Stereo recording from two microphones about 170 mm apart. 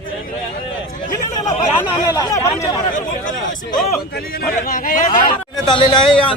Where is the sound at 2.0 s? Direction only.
20° left (ahead or behind).